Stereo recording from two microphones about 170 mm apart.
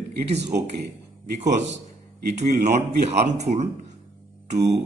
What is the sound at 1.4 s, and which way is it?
Speech, 45° right (ahead or behind).